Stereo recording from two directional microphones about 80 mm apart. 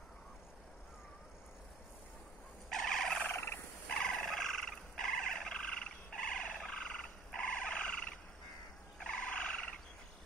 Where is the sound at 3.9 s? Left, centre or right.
Centre.